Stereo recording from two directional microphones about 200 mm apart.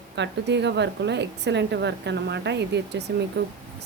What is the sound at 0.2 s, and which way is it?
A woman's voice, 60° right (ahead or behind).